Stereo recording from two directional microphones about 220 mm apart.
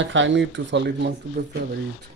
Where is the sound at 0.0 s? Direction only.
60° right (ahead or behind).